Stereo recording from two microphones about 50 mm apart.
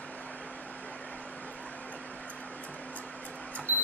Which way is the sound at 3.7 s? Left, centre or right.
Right.